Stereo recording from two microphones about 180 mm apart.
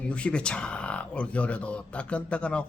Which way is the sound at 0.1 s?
5° left (ahead or behind).